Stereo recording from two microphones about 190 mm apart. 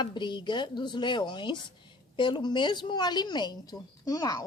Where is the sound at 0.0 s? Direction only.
25° left (ahead or behind).